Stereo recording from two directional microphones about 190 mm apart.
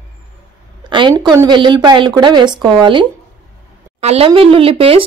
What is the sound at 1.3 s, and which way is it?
Speech, 20° right (ahead or behind).